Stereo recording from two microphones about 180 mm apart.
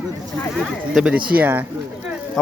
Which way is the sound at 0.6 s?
5° right (ahead or behind).